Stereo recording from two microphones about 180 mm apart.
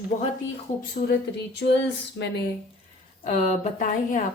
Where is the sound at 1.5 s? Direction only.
70° left (ahead or behind).